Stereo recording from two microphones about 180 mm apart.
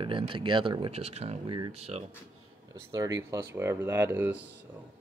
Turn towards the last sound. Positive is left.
turn(degrees=-10)  # may be behind; listen again after turning